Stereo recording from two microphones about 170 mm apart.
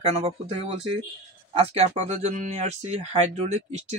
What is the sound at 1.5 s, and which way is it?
Speech, 40° right (ahead or behind).